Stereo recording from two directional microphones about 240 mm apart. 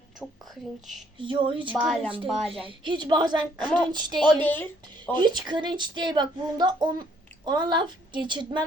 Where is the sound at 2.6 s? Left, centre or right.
Centre.